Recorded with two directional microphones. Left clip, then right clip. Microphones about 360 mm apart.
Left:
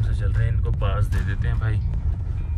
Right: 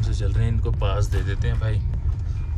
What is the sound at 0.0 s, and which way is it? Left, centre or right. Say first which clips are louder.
Music: right 1 dB; centre.